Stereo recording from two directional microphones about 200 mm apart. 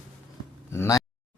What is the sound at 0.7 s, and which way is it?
Speech, 15° left (ahead or behind).